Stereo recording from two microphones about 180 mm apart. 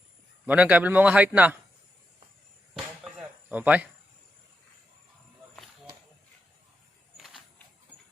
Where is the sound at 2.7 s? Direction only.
Centre (ahead or behind).